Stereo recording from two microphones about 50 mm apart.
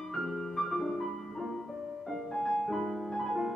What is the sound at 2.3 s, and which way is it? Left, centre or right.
Music, centre.